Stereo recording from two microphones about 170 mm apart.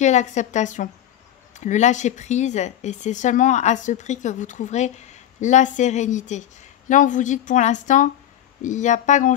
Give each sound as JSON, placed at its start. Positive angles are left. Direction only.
{"t": 0.0, "sound": "speech", "side_deg": 45}